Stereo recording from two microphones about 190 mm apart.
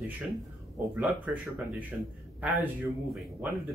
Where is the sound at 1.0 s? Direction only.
5° right (ahead or behind).